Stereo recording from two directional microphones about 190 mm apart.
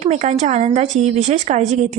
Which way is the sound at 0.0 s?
35° right (ahead or behind).